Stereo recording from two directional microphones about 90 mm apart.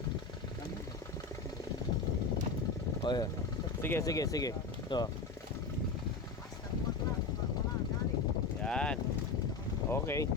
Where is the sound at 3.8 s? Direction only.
25° left (ahead or behind).